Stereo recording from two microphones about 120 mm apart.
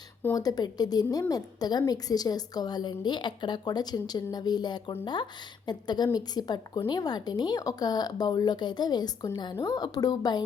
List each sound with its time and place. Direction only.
0.3 s speech: 30° left (ahead or behind)